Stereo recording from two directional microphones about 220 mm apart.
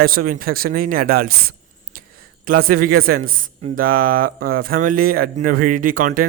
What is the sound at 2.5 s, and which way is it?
A man's voice, 40° right (ahead or behind).